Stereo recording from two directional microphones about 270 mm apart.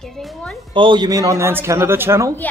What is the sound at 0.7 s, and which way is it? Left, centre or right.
Speech, centre.